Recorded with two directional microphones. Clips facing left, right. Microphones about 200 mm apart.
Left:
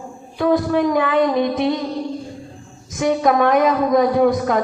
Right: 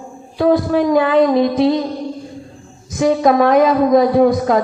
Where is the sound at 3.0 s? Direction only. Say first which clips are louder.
Right 3 dB; 30° right (ahead or behind).